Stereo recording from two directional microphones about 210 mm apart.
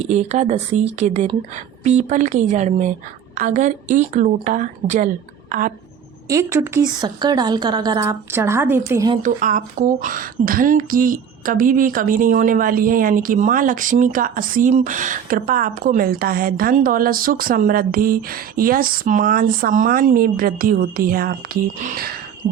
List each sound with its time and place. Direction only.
0.1 s a woman's voice: 30° right (ahead or behind)
6.2 s speech: 15° right (ahead or behind)
9.2 s speech: 40° right (ahead or behind)